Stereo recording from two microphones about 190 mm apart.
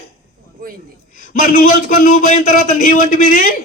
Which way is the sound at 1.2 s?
45° left (ahead or behind).